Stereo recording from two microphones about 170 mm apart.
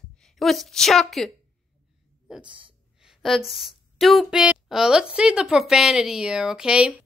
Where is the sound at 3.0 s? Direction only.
Centre (ahead or behind).